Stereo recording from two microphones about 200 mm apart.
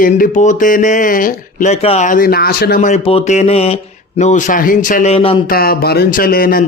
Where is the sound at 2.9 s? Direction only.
30° left (ahead or behind).